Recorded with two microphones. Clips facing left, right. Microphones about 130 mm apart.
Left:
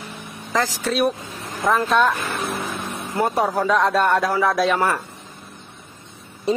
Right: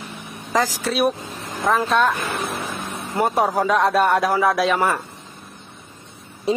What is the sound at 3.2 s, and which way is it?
A man's voice, 10° right (ahead or behind).